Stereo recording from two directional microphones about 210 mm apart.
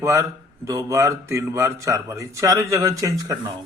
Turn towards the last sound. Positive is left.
turn(degrees=-15)  # may be behind; listen again after turning